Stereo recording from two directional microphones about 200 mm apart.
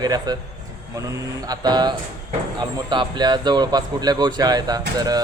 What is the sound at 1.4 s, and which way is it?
Speech, 20° right (ahead or behind).